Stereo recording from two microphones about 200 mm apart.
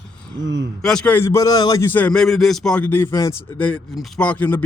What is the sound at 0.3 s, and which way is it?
Speech, 60° right (ahead or behind).